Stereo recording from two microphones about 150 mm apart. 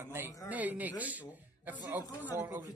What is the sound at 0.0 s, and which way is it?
Speech, 15° right (ahead or behind).